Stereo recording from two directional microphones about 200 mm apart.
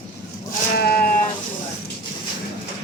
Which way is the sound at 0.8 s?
50° left (ahead or behind).